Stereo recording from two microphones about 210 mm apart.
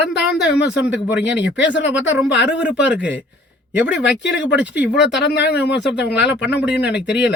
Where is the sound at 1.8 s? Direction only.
5° right (ahead or behind).